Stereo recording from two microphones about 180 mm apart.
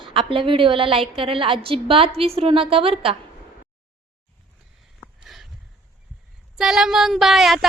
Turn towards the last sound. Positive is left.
turn(degrees=0)  # may be behind; listen again after turning